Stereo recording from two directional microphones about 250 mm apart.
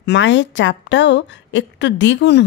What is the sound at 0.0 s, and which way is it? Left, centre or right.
Speech, left.